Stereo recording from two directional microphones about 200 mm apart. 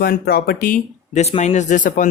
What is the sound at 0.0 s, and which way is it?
Speech, 50° left (ahead or behind).